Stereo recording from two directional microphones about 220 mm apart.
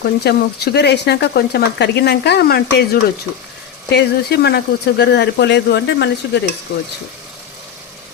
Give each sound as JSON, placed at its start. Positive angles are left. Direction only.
{"t": 0.0, "sound": "speech", "side_deg": 50}